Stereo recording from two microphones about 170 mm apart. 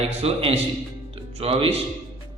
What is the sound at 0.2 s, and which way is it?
A man's voice, 35° right (ahead or behind).